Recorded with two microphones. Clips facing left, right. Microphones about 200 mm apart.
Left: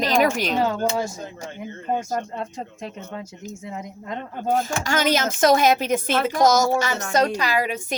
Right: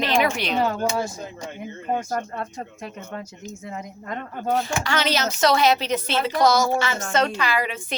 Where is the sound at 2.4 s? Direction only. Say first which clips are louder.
Left 1 dB; 25° left (ahead or behind).